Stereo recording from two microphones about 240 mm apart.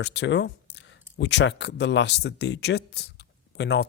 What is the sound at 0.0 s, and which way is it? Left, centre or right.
Speech, left.